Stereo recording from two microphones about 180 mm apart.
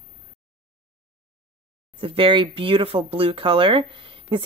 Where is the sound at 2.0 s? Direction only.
30° right (ahead or behind).